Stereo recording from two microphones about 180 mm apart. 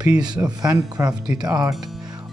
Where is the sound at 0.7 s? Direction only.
20° right (ahead or behind).